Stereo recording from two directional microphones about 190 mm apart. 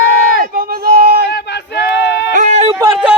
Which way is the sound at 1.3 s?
65° left (ahead or behind).